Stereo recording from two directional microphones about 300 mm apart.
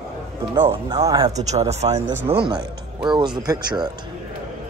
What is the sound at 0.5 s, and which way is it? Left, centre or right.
Speech, centre.